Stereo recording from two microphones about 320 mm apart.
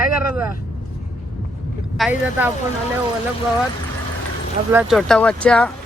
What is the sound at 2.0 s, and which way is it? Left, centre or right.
Speech, centre.